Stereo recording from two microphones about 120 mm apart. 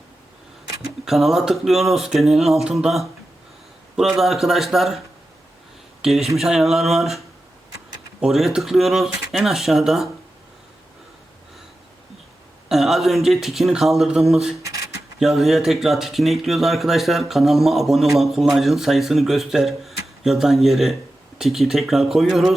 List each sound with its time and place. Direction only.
1.0 s speech: centre (ahead or behind)
4.2 s speech: centre (ahead or behind)
8.2 s speech: centre (ahead or behind)
12.6 s speech: centre (ahead or behind)
14.6 s speech: 30° right (ahead or behind)
15.2 s speech: centre (ahead or behind)